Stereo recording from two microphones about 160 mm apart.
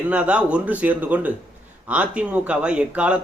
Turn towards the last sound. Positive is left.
turn(degrees=-5)  # may be behind; listen again after turning